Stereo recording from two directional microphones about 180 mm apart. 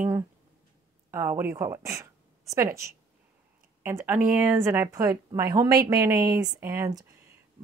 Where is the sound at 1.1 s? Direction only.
15° right (ahead or behind).